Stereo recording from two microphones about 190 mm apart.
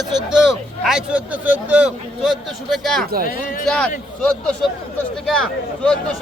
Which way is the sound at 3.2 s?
45° left (ahead or behind).